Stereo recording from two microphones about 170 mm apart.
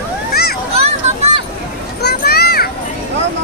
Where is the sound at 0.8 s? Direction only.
40° right (ahead or behind).